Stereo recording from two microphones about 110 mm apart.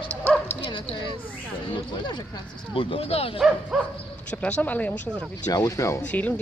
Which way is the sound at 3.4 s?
5° right (ahead or behind).